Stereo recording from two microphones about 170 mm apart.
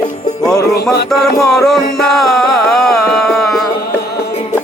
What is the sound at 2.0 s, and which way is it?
Music, centre (ahead or behind).